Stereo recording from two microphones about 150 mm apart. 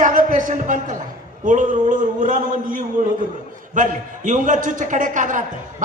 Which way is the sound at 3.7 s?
60° right (ahead or behind).